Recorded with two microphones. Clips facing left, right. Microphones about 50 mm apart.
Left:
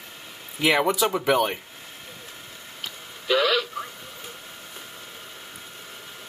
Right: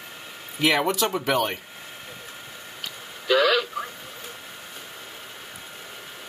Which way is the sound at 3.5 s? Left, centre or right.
Centre.